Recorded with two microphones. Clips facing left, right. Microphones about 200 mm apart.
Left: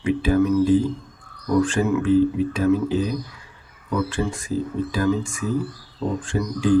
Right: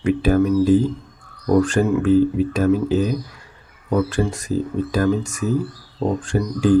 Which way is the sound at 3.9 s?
40° right (ahead or behind).